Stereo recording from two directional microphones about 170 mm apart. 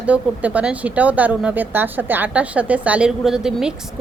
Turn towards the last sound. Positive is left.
turn(degrees=-5)  # may be behind; listen again after turning